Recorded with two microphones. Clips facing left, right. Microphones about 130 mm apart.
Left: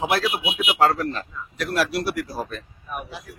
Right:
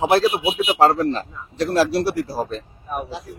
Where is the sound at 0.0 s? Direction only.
30° right (ahead or behind).